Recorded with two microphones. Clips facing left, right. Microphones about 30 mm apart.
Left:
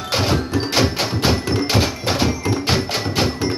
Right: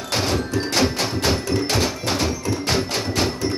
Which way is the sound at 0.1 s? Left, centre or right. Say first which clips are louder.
Left 2 dB; centre.